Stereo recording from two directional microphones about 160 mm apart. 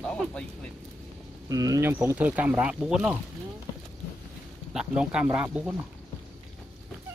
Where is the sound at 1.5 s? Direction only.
20° right (ahead or behind); by 3.2 s 5° right (ahead or behind).